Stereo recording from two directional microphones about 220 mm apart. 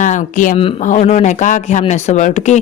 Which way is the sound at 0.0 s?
35° left (ahead or behind).